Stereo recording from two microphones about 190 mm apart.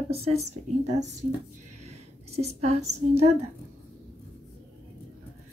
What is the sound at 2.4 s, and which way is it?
A woman's voice, 35° right (ahead or behind).